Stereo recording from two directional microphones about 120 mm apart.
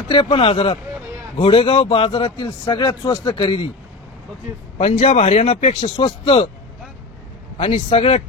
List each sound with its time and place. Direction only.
0.1 s speech: 45° left (ahead or behind)
4.7 s speech: 65° left (ahead or behind)
7.5 s speech: 55° left (ahead or behind)